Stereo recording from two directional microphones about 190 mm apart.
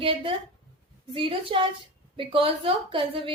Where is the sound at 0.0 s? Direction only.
30° right (ahead or behind).